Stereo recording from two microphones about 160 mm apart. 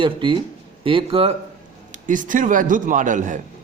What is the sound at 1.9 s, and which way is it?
A man's voice, 55° right (ahead or behind).